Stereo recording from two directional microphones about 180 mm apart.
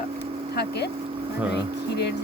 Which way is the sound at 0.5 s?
65° left (ahead or behind).